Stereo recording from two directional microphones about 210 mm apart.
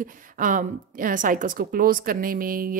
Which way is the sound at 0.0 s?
40° right (ahead or behind).